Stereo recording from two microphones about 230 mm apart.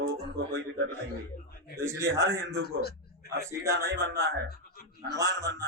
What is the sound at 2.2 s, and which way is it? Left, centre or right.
Speech, right.